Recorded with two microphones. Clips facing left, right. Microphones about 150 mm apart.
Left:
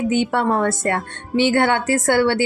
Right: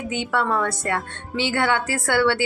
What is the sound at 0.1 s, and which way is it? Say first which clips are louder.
A woman's voice: left 1 dB; 50° left (ahead or behind).